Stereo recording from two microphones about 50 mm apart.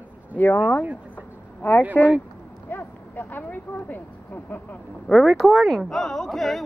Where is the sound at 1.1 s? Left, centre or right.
Left.